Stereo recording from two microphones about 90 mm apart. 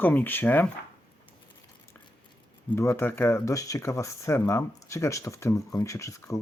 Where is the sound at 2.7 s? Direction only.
30° left (ahead or behind).